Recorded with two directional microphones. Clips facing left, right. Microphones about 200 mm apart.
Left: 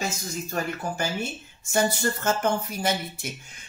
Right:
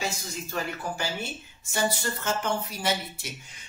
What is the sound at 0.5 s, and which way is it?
Music, 45° left (ahead or behind).